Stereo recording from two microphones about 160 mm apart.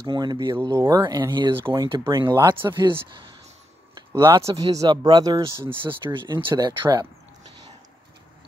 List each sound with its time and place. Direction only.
0.0 s speech: 25° right (ahead or behind)
3.9 s speech: 25° right (ahead or behind)
5.6 s speech: 15° right (ahead or behind)
6.1 s speech: 30° right (ahead or behind)